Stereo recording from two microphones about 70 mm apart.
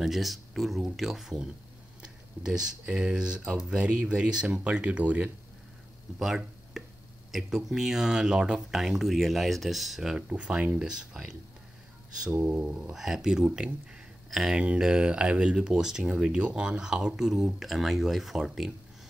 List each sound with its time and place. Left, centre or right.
0.0 s speech: centre
6.2 s speech: centre
10.2 s speech: centre
12.4 s speech: centre